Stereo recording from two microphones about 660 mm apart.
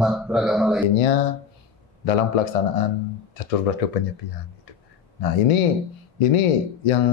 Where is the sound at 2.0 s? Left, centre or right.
Left.